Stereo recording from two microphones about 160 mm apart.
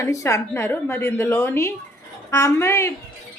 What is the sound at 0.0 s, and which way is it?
A woman's voice, 20° left (ahead or behind).